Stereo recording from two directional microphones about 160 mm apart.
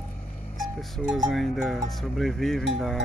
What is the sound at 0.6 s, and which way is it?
Speech, centre (ahead or behind).